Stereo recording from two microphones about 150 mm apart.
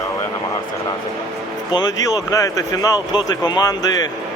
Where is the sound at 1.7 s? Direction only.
25° left (ahead or behind).